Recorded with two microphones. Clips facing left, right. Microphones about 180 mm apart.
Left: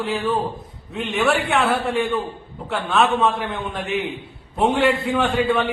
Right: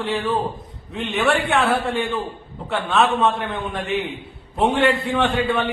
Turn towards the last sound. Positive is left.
turn(degrees=0)  # may be behind; listen again after turning